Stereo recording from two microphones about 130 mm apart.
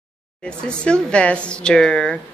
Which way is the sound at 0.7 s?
10° left (ahead or behind).